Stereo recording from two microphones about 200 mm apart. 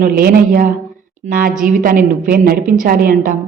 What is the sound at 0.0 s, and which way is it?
A woman's voice, 45° right (ahead or behind).